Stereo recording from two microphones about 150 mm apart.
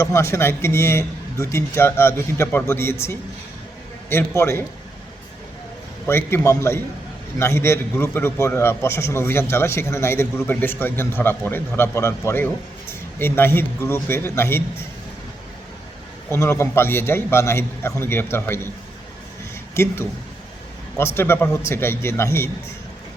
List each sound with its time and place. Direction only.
0.0 s a man's voice: 20° left (ahead or behind)
6.1 s a man's voice: 15° left (ahead or behind)
16.3 s a man's voice: 15° left (ahead or behind)
19.7 s a man's voice: 15° left (ahead or behind)